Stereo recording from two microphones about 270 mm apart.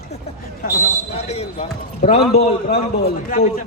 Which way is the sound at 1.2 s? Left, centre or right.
Left.